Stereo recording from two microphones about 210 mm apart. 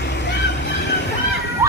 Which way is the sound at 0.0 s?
55° left (ahead or behind).